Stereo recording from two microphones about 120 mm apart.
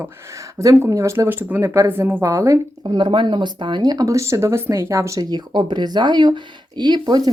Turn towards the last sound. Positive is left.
turn(degrees=-35)  # may be behind; listen again after turning